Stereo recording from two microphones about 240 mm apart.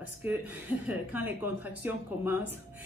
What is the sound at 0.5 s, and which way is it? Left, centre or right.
Speech, centre.